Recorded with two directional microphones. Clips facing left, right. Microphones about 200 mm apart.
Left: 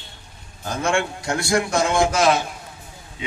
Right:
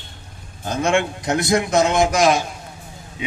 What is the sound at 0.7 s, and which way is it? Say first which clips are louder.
A man's voice: right 3 dB; 20° right (ahead or behind).